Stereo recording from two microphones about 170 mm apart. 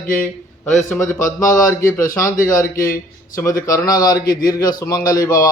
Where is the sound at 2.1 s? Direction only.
20° left (ahead or behind).